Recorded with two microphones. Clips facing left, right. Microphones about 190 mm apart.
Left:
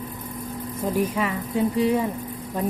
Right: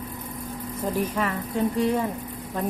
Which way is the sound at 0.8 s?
10° left (ahead or behind).